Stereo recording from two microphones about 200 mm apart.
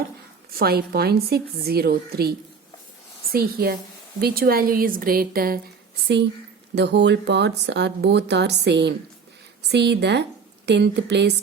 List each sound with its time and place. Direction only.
0.5 s a woman's voice: 50° right (ahead or behind)
3.3 s a woman's voice: 50° right (ahead or behind)
6.7 s speech: 60° right (ahead or behind)